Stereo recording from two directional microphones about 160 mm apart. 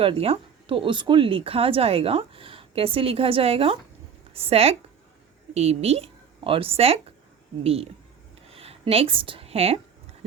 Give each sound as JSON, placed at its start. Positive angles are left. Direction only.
{"t": 0.0, "sound": "a woman's voice", "side_deg": -35}